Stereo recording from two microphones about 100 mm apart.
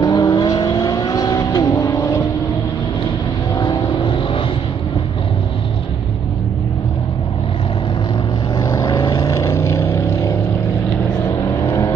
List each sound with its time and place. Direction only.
0.0 s vehicle: 45° left (ahead or behind)
3.5 s vehicle: 55° left (ahead or behind)
8.5 s vehicle: 40° left (ahead or behind)
9.4 s vehicle: 30° left (ahead or behind)